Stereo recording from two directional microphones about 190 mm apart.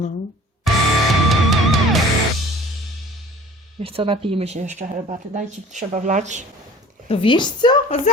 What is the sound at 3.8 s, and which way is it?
Speech, 30° right (ahead or behind).